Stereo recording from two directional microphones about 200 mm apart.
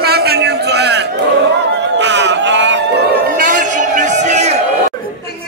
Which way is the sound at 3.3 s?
40° right (ahead or behind).